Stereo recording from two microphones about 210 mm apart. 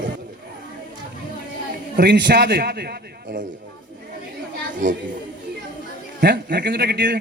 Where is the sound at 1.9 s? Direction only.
50° right (ahead or behind).